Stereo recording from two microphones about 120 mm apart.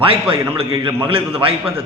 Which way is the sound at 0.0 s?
50° right (ahead or behind).